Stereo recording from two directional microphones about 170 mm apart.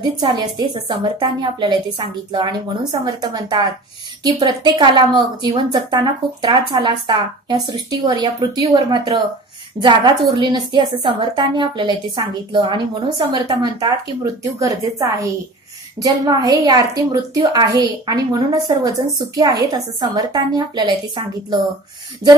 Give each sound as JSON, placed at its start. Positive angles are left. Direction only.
{"t": 0.0, "sound": "a woman's voice", "side_deg": -25}